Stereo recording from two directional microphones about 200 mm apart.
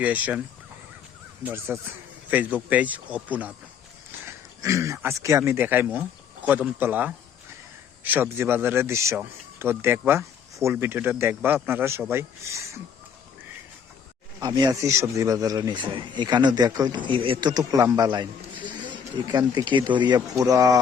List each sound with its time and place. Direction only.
0.0 s speech: 10° right (ahead or behind)
1.5 s speech: 10° right (ahead or behind)
14.3 s speech: 20° right (ahead or behind)